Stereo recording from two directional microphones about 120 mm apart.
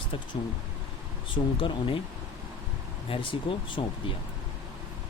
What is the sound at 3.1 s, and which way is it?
Speech, 50° left (ahead or behind).